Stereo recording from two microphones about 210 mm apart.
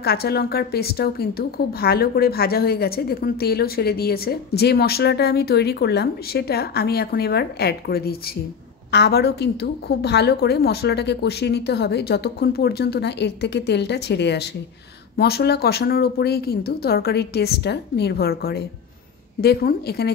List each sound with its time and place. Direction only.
0.0 s speech: 50° left (ahead or behind)